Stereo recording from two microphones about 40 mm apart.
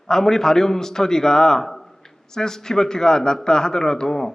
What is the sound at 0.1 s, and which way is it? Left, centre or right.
A man's voice, centre.